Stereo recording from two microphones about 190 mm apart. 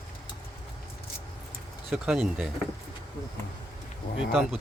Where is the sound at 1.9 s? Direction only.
5° right (ahead or behind).